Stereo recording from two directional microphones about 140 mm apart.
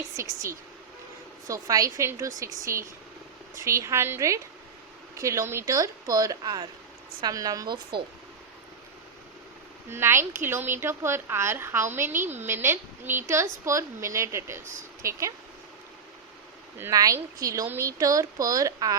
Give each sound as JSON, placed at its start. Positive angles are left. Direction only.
{"t": 1.5, "sound": "speech", "side_deg": -25}
{"t": 9.9, "sound": "a woman's voice", "side_deg": -15}
{"t": 16.8, "sound": "speech", "side_deg": -25}